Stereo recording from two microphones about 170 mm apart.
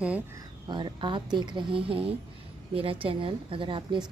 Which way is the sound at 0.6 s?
25° right (ahead or behind).